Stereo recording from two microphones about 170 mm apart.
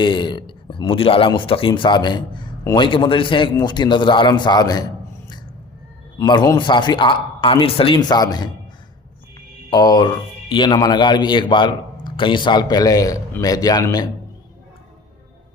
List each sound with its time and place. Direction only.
0.0 s speech: 25° left (ahead or behind)
6.1 s speech: 25° left (ahead or behind)
9.6 s speech: 20° left (ahead or behind)